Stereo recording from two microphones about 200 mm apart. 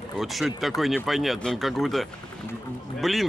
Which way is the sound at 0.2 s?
Centre (ahead or behind).